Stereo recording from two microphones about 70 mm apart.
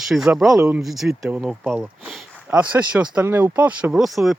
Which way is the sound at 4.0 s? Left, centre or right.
Centre.